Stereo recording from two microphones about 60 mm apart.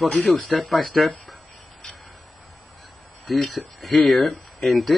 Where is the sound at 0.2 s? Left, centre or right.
Centre.